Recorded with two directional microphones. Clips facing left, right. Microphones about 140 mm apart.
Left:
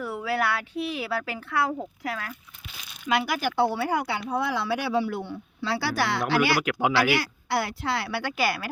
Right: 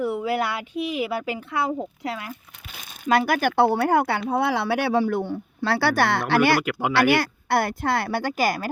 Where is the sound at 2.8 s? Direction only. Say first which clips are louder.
Right 5 dB; 45° right (ahead or behind).